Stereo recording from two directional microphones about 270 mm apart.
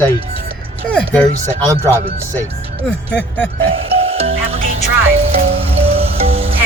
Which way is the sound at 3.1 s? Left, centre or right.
Centre.